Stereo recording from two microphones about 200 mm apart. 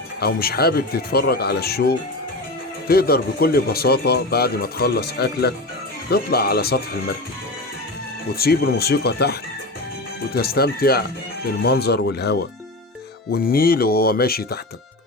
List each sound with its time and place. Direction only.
0.2 s speech: 50° left (ahead or behind)
8.4 s speech: 50° left (ahead or behind)